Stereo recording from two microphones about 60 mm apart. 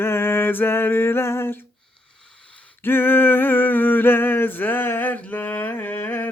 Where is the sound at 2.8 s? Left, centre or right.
Left.